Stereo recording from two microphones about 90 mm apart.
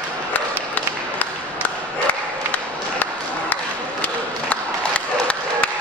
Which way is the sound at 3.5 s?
15° left (ahead or behind).